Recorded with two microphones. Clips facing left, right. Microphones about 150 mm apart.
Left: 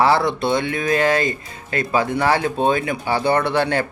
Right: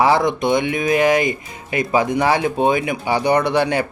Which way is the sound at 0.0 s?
15° right (ahead or behind).